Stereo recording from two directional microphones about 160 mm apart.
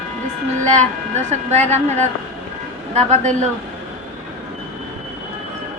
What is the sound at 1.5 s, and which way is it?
A woman's voice, 45° right (ahead or behind).